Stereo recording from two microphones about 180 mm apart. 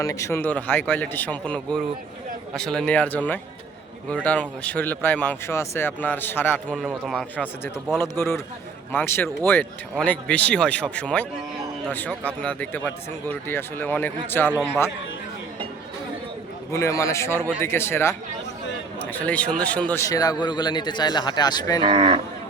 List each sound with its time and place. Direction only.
0.0 s a man's voice: 15° left (ahead or behind); by 7.5 s centre (ahead or behind)
7.9 s speech: 15° left (ahead or behind)
16.7 s a man's voice: 15° left (ahead or behind)
21.8 s speech: 30° right (ahead or behind)